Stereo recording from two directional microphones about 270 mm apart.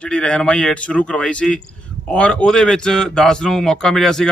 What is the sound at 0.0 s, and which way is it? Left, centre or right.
A man's voice, centre.